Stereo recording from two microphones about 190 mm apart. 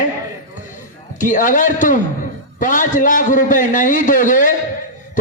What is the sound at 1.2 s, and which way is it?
A man's voice, 40° left (ahead or behind).